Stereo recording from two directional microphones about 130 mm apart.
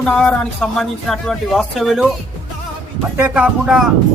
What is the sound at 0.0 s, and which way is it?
Speech, 10° left (ahead or behind).